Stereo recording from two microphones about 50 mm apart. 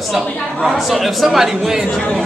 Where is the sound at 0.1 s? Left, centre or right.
Centre.